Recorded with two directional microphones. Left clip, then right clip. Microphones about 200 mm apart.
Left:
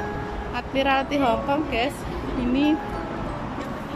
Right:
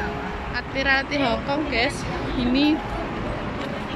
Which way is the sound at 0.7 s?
15° left (ahead or behind).